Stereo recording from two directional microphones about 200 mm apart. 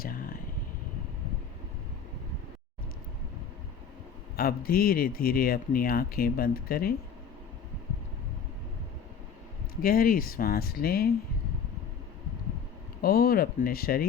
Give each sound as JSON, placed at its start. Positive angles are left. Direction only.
{"t": 0.0, "sound": "a sound", "side_deg": 45}
{"t": 4.4, "sound": "speech", "side_deg": 50}
{"t": 9.8, "sound": "speech", "side_deg": 45}
{"t": 13.0, "sound": "speech", "side_deg": 50}